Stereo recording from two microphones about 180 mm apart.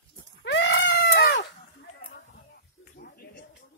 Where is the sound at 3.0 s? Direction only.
55° left (ahead or behind).